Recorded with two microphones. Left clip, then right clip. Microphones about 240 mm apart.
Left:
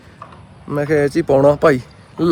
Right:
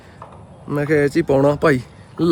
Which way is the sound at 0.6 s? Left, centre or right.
Centre.